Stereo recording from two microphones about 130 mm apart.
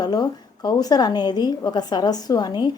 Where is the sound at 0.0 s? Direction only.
30° left (ahead or behind).